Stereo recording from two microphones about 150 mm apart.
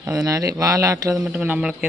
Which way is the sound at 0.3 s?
25° right (ahead or behind).